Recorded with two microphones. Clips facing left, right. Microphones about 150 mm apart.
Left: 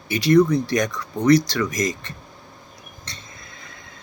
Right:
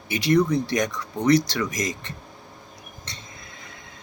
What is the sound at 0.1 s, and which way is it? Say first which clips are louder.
Speech: left 4 dB; 20° right (ahead or behind).